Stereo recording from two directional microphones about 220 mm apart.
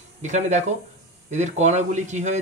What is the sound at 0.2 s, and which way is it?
A man's voice, 35° right (ahead or behind).